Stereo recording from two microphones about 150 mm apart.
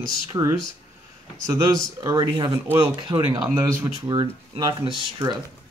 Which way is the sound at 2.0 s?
25° right (ahead or behind).